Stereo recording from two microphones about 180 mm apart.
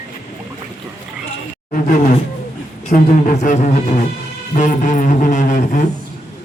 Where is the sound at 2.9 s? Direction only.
45° left (ahead or behind).